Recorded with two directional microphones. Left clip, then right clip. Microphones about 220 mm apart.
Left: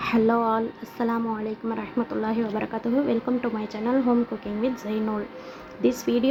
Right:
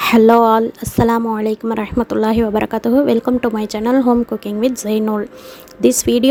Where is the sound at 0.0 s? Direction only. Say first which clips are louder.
Right 12 dB; 45° right (ahead or behind).